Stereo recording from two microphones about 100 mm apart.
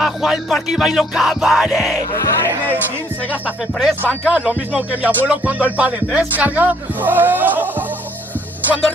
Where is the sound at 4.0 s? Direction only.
15° right (ahead or behind).